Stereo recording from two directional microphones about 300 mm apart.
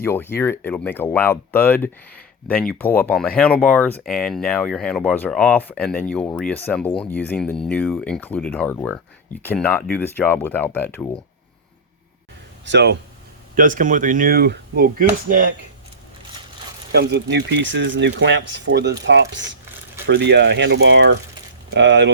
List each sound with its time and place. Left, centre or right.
0.0 s speech: centre
12.6 s speech: right
16.9 s speech: right